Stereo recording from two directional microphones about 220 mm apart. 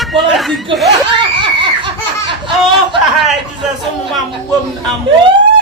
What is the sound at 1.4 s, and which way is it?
Laughter, 20° right (ahead or behind).